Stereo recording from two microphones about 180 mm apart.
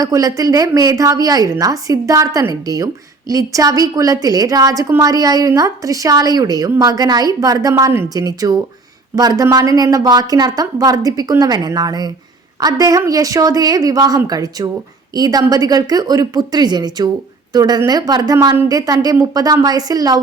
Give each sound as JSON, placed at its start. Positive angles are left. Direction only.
{"t": 0.0, "sound": "a woman's voice", "side_deg": -20}